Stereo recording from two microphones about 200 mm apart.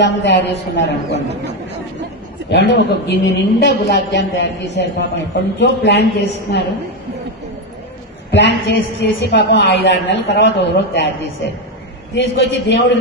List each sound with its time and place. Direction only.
0.0 s a woman's voice: 60° left (ahead or behind)
2.5 s a woman's voice: 60° left (ahead or behind)
8.3 s a woman's voice: 60° left (ahead or behind)